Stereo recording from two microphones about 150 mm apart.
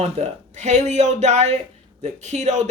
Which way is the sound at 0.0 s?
50° right (ahead or behind).